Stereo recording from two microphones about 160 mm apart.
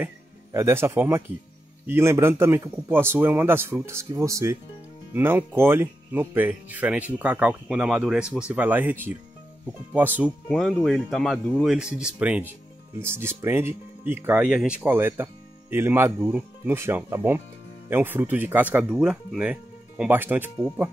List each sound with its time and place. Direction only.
0.0 s speech: 15° right (ahead or behind)
10.5 s speech: centre (ahead or behind)